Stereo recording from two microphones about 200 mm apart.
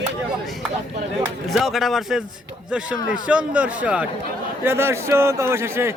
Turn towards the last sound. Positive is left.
turn(degrees=-15)  # may be behind; listen again after turning